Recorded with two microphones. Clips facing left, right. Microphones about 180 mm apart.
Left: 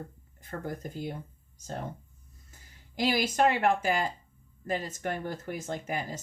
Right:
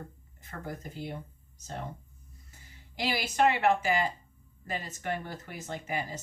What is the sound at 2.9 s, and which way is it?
Speech, 45° left (ahead or behind).